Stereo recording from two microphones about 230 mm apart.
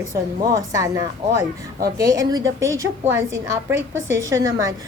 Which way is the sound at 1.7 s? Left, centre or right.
Right.